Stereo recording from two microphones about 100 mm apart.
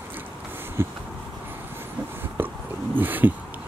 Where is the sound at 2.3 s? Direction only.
20° right (ahead or behind).